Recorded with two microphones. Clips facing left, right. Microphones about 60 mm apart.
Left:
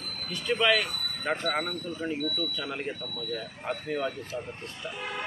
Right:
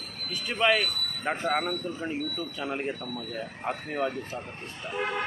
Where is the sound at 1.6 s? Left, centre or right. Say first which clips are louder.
Right 1 dB; right.